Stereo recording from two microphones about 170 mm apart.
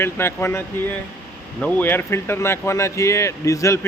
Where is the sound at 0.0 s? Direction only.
15° left (ahead or behind).